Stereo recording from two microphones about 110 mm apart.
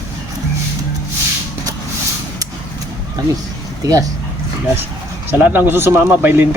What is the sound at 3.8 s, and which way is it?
Speech, 35° right (ahead or behind).